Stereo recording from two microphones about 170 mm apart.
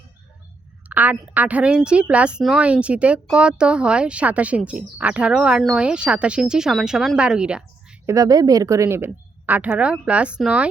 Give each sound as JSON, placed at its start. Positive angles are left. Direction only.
{"t": 0.9, "sound": "a woman's voice", "side_deg": -10}
{"t": 8.0, "sound": "a woman's voice", "side_deg": -20}